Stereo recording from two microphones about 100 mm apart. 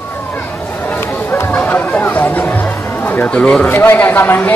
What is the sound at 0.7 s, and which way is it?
Chatter, 20° left (ahead or behind).